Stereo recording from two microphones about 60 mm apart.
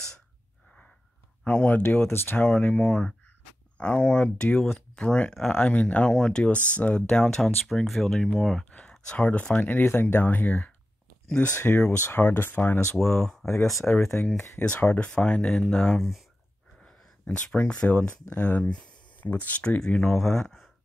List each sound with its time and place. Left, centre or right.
1.4 s speech: left
2.0 s speech: left
2.4 s speech: centre
5.5 s speech: left; by 8.6 s centre
9.1 s speech: left
13.2 s speech: centre
14.2 s speech: left
14.6 s speech: left
16.0 s speech: centre
16.8 s a sound: centre
18.3 s speech: left
20.1 s speech: centre